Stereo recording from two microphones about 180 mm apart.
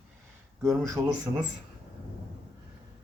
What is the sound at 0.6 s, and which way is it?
Speech, 20° right (ahead or behind).